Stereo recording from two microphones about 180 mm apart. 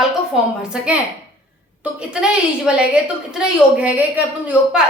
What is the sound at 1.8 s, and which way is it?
A woman's voice, 5° right (ahead or behind).